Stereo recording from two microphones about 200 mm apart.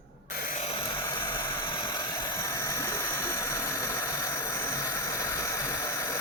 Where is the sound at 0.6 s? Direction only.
25° left (ahead or behind).